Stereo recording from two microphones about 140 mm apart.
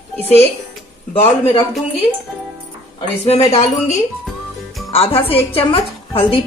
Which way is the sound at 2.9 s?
45° left (ahead or behind).